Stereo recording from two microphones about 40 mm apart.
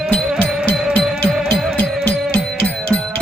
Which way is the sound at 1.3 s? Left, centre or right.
Centre.